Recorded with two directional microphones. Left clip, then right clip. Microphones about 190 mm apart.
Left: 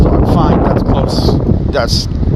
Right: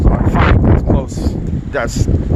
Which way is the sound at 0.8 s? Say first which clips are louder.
Left 4 dB; 35° left (ahead or behind).